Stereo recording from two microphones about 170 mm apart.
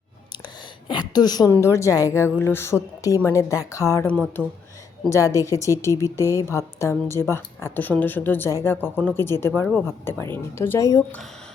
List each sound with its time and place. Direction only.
0.9 s a woman's voice: 25° left (ahead or behind)
4.4 s speech: 5° right (ahead or behind)
5.0 s a woman's voice: 20° left (ahead or behind)